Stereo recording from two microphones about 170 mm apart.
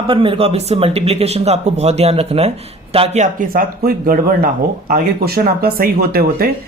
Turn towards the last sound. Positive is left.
turn(degrees=-65)  # may be behind; listen again after turning